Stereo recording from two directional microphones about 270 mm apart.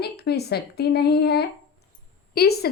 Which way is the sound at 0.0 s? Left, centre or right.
Left.